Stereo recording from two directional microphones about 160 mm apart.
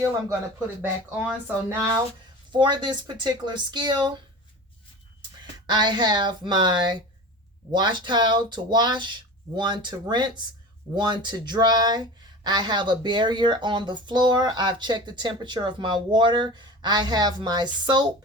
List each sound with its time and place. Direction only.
0.8 s speech: 10° right (ahead or behind)
2.5 s speech: 30° right (ahead or behind)
5.6 s speech: 25° right (ahead or behind)